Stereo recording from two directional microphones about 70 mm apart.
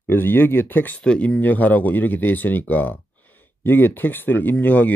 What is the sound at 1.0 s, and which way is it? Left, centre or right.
Speech, centre.